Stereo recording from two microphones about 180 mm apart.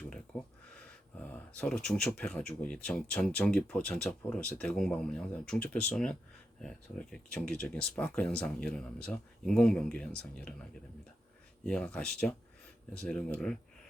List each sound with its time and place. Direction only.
0.3 s speech: 5° left (ahead or behind)
1.5 s speech: 5° left (ahead or behind)